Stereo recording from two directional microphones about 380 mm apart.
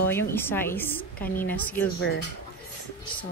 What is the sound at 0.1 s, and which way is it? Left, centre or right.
A woman's voice, centre.